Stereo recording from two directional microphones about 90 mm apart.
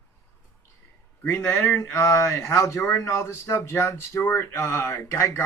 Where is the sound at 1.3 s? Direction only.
25° left (ahead or behind).